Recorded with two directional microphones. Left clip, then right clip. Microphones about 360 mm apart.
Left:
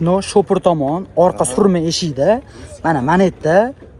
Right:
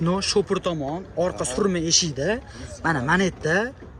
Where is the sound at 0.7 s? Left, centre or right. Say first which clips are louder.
Left 11 dB; left.